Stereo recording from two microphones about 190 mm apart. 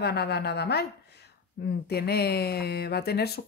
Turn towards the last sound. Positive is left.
turn(degrees=55)  # may be behind; listen again after turning